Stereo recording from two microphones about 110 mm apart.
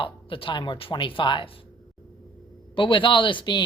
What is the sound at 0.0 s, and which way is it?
Speech, 50° left (ahead or behind).